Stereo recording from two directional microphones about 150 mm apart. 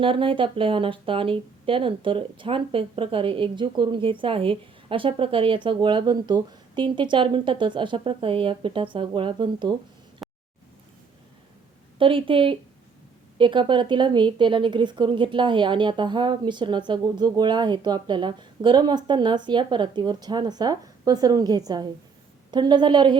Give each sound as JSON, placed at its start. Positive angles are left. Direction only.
{"t": 0.0, "sound": "speech", "side_deg": -35}
{"t": 10.2, "sound": "a sound", "side_deg": 0}
{"t": 11.9, "sound": "speech", "side_deg": -35}